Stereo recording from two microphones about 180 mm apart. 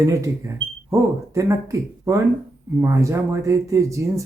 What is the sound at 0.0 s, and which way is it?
Speech, 15° right (ahead or behind).